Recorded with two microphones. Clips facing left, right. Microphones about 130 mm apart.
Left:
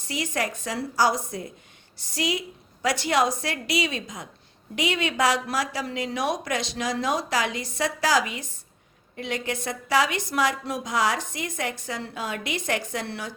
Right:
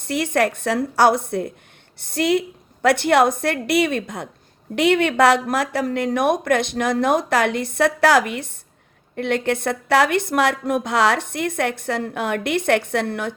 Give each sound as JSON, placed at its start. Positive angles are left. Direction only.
{"t": 0.0, "sound": "a woman's voice", "side_deg": -60}